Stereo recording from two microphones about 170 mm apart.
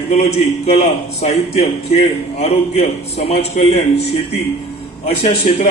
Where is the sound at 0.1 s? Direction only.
40° left (ahead or behind).